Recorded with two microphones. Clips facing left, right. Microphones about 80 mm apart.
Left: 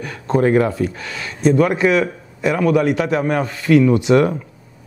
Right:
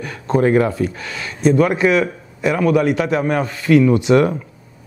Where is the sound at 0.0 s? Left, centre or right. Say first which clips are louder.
Even; right.